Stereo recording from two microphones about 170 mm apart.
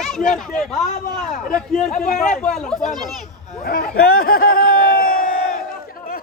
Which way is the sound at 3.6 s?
65° left (ahead or behind).